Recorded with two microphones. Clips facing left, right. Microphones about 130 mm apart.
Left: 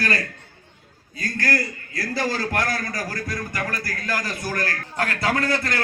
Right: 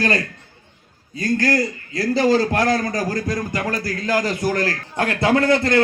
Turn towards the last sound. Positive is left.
turn(degrees=-25)  # may be behind; listen again after turning